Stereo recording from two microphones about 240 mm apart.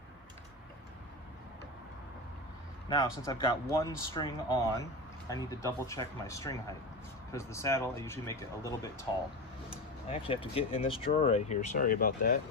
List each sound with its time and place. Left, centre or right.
2.9 s speech: centre
10.1 s speech: left